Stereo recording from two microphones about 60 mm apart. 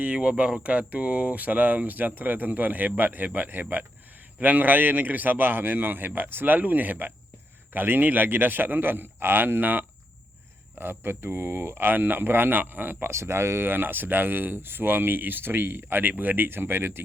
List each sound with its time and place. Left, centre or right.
0.0 s speech: right
13.1 s speech: right
13.7 s speech: right